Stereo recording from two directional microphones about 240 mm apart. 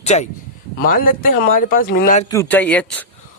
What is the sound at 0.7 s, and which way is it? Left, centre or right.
Speech, left.